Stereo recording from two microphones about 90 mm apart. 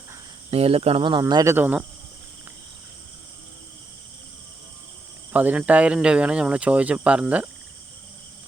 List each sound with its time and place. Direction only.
0.5 s speech: 90° right; by 1.2 s 75° right (ahead or behind)
1.5 s speech: 20° right (ahead or behind)
5.3 s speech: 20° right (ahead or behind)